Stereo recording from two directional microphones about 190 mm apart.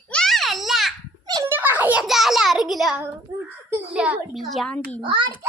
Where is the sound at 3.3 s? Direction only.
15° right (ahead or behind).